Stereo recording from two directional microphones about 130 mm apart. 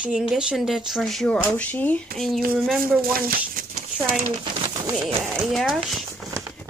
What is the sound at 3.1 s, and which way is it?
Speech, 90° right.